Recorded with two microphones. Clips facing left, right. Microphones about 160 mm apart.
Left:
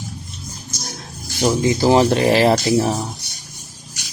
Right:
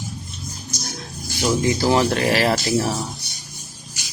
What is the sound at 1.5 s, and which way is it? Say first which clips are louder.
Speech: left 3 dB; 25° left (ahead or behind).